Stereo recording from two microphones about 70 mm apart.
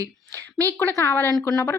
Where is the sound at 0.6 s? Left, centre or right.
Left.